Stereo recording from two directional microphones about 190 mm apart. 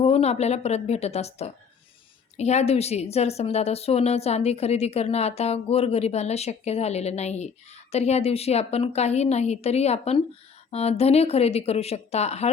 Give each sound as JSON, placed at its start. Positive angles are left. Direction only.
{"t": 0.0, "sound": "a woman's voice", "side_deg": 35}